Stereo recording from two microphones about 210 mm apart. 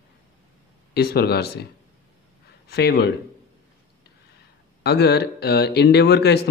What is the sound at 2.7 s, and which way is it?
Speech, 50° left (ahead or behind).